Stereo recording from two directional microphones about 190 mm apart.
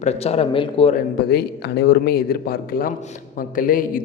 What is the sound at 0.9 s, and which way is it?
A man's voice, 55° left (ahead or behind).